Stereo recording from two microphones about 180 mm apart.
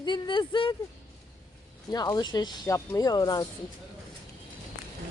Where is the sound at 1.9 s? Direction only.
20° left (ahead or behind).